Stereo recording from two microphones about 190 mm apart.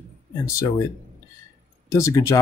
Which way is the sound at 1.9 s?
15° left (ahead or behind).